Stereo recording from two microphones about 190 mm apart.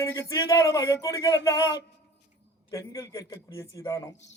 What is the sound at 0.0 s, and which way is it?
Speech, 15° left (ahead or behind).